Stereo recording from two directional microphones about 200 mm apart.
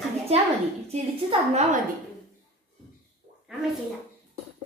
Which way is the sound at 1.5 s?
35° right (ahead or behind).